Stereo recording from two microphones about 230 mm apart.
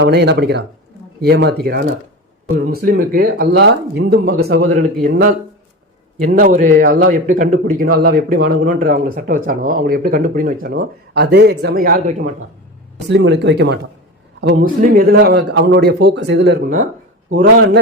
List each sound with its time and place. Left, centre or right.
0.0 s a man's voice: right
6.4 s speech: right
13.1 s a man's voice: right